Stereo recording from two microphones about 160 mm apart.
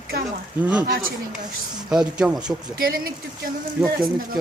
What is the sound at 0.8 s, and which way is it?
Speech, 65° right (ahead or behind).